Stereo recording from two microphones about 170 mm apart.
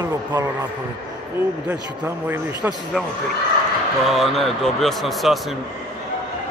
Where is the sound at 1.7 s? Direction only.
15° right (ahead or behind).